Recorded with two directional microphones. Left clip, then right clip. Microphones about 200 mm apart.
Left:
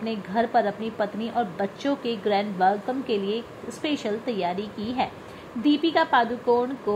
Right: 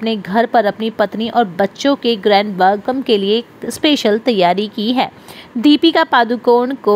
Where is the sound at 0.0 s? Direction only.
35° right (ahead or behind).